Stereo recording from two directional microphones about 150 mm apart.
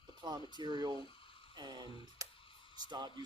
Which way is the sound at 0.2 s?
30° right (ahead or behind).